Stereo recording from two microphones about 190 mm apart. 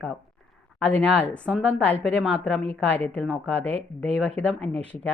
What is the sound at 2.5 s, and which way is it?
Speech, 35° right (ahead or behind).